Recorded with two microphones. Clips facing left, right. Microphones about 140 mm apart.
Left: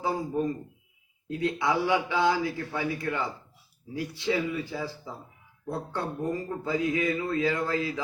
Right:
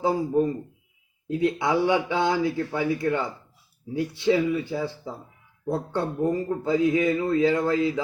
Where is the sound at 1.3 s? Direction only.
25° right (ahead or behind).